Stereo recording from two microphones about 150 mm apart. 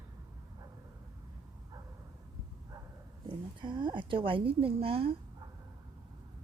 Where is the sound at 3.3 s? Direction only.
30° right (ahead or behind).